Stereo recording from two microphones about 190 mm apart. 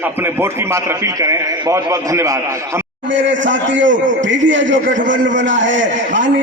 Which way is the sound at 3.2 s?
75° right (ahead or behind).